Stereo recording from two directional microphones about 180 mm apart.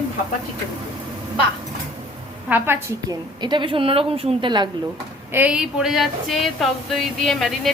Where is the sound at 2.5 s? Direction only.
10° right (ahead or behind).